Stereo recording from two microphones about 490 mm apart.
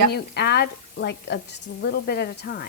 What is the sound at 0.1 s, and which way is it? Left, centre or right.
Speech, centre.